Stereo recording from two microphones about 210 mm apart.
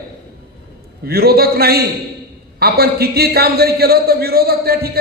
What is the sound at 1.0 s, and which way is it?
Speech, 50° right (ahead or behind).